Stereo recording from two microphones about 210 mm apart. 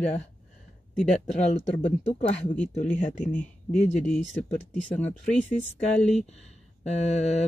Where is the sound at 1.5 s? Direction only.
30° left (ahead or behind).